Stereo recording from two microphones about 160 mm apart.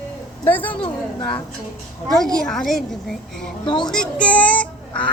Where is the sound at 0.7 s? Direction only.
30° left (ahead or behind).